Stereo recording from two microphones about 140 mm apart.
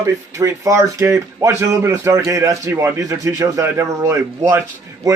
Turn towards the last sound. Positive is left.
turn(degrees=-25)  # may be behind; listen again after turning